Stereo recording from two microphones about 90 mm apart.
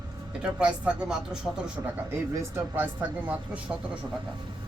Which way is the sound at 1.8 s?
35° right (ahead or behind).